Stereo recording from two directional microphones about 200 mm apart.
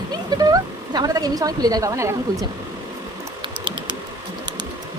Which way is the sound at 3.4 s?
25° right (ahead or behind).